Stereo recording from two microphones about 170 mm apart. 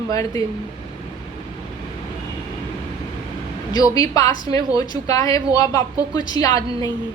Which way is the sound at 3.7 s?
20° left (ahead or behind).